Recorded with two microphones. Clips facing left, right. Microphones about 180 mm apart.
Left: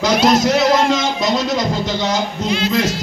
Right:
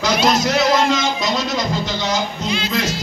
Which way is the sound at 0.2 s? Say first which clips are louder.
Left 3 dB; 50° left (ahead or behind).